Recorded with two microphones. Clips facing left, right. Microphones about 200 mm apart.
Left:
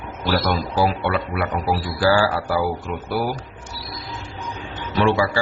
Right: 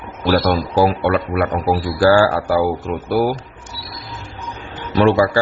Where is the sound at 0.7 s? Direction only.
45° right (ahead or behind).